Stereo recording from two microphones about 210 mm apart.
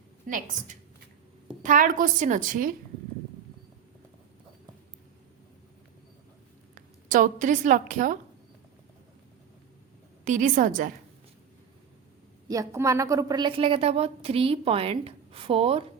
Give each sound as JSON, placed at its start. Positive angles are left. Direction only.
{"t": 0.3, "sound": "a woman's voice", "side_deg": -40}
{"t": 6.7, "sound": "a woman's voice", "side_deg": -40}
{"t": 10.2, "sound": "a woman's voice", "side_deg": -35}
{"t": 12.5, "sound": "a woman's voice", "side_deg": -15}